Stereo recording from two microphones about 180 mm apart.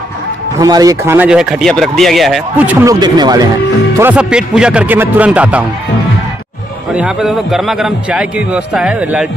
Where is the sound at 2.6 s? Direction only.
10° right (ahead or behind).